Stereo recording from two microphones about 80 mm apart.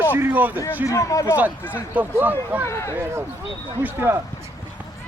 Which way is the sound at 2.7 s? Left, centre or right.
Left.